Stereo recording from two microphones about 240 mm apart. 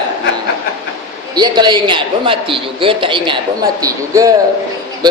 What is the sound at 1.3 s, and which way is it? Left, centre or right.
A man's voice, centre.